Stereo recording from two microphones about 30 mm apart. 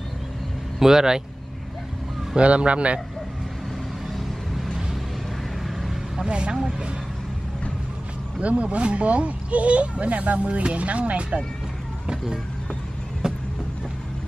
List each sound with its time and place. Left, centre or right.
0.7 s speech: centre
2.3 s speech: right
5.6 s vehicle: centre
6.2 s speech: right
8.4 s speech: right
13.2 s vehicle: right